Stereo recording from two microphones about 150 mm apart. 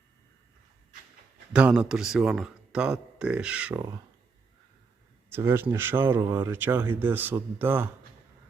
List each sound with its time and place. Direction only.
1.5 s a man's voice: 5° right (ahead or behind)
5.3 s speech: 15° right (ahead or behind)